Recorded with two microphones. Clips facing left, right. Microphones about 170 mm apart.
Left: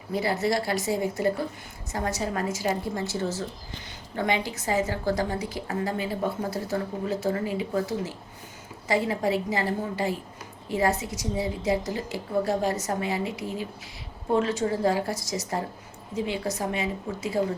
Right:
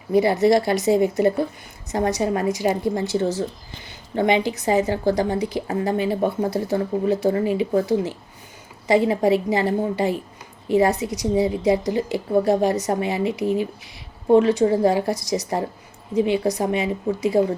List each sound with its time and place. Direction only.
0.1 s a woman's voice: 15° right (ahead or behind)